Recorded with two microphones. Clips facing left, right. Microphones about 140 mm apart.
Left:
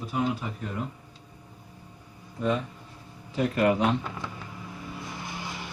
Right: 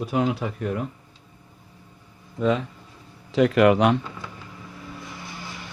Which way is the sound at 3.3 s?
90° right.